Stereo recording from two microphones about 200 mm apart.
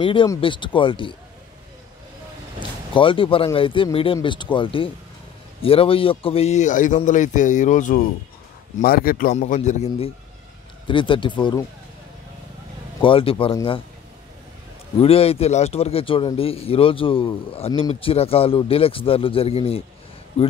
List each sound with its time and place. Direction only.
0.0 s a man's voice: 25° left (ahead or behind)
2.9 s a man's voice: 25° left (ahead or behind); by 9.3 s 45° left (ahead or behind)
9.3 s a man's voice: 35° left (ahead or behind)
13.0 s a man's voice: 25° left (ahead or behind)
15.0 s a man's voice: 30° left (ahead or behind)